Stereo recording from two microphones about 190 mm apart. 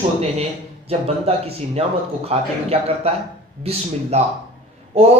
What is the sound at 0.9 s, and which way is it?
A man's voice, 30° right (ahead or behind).